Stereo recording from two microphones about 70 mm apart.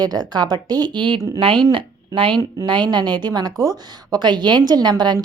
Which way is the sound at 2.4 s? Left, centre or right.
Right.